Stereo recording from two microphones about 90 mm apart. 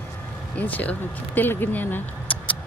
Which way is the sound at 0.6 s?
15° left (ahead or behind).